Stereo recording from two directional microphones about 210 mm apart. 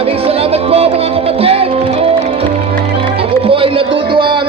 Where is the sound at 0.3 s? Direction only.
30° right (ahead or behind).